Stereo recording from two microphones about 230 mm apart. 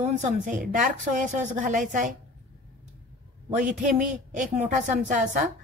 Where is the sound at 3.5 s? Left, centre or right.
Right.